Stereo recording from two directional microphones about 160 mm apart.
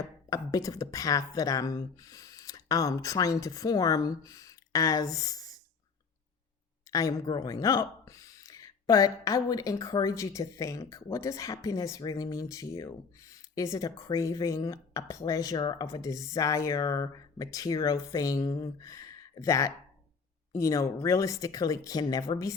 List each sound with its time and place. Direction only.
0.0 s speech: 20° left (ahead or behind)
6.9 s speech: 20° left (ahead or behind)